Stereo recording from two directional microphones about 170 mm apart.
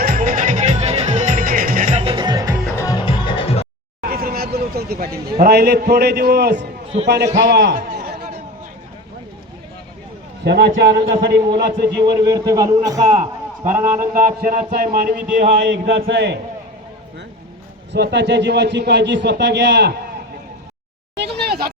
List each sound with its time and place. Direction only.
0.0 s music: 55° right (ahead or behind); by 2.6 s 20° right (ahead or behind)
2.7 s music: 20° left (ahead or behind)
3.1 s music: 35° left (ahead or behind)
4.0 s speech: 60° right (ahead or behind)
6.6 s a sound: 40° right (ahead or behind)
7.5 s a man's voice: 75° right (ahead or behind)
7.9 s chatter: 55° right (ahead or behind)
10.4 s a man's voice: 75° right (ahead or behind)
12.2 s speech: 25° right (ahead or behind)
14.1 s a man's voice: 55° right (ahead or behind); by 16.4 s 90° right
17.9 s speech: 85° right
21.2 s a sound: 75° right (ahead or behind)